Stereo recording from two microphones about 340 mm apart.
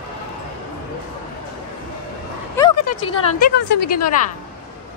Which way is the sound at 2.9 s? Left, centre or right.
Left.